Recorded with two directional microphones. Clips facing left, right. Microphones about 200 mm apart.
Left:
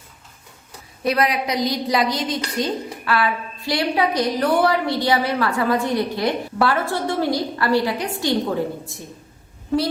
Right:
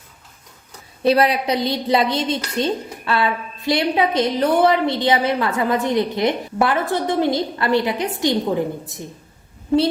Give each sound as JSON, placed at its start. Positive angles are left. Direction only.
{"t": 1.0, "sound": "a woman's voice", "side_deg": -30}